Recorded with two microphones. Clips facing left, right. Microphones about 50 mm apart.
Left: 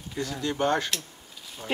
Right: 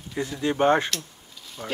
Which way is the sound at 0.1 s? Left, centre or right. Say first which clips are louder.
Right 4 dB; centre.